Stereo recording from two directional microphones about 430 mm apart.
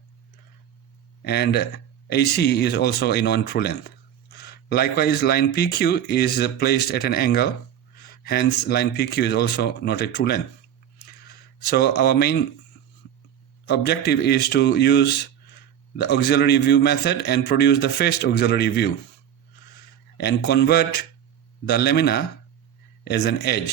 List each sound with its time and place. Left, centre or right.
1.2 s speech: left
11.7 s speech: left
13.7 s speech: left
20.1 s speech: left